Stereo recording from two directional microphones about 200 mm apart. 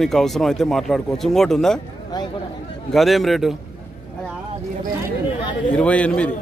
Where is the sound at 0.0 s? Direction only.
Centre (ahead or behind).